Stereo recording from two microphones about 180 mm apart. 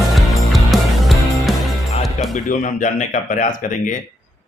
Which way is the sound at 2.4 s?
45° left (ahead or behind).